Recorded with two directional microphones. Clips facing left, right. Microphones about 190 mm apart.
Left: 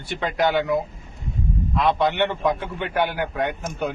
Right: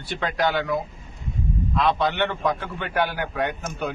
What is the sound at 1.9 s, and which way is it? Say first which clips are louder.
Speech: left 3 dB; 20° left (ahead or behind).